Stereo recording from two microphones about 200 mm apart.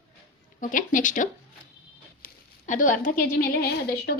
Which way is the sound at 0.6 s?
40° left (ahead or behind).